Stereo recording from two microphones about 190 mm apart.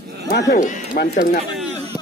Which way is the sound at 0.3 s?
60° left (ahead or behind).